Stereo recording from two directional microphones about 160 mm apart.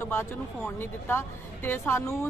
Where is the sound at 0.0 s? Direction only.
15° left (ahead or behind).